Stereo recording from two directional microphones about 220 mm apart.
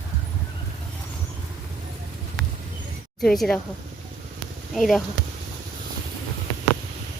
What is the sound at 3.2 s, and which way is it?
Speech, centre (ahead or behind).